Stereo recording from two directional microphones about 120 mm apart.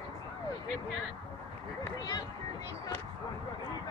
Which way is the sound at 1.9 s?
30° left (ahead or behind).